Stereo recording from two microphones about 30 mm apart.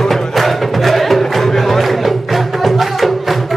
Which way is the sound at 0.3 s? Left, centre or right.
Centre.